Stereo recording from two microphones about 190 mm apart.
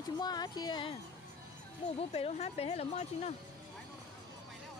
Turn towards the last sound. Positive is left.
turn(degrees=35)  # may be behind; listen again after turning